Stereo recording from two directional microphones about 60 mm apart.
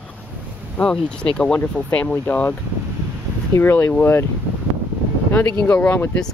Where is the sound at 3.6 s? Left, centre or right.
Left.